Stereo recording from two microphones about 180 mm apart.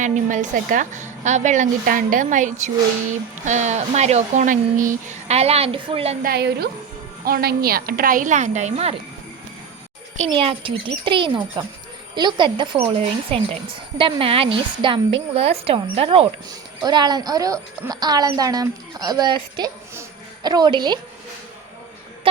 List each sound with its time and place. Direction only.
0.0 s a woman's voice: 45° right (ahead or behind)
6.2 s a woman's voice: 60° right (ahead or behind); by 9.0 s 35° right (ahead or behind)
10.3 s a woman's voice: 30° right (ahead or behind)